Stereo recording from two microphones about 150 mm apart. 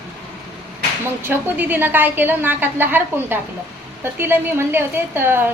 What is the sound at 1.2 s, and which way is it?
A woman's voice, 15° right (ahead or behind).